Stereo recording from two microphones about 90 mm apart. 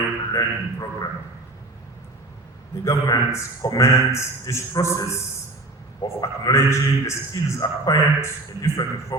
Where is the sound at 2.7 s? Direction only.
35° left (ahead or behind).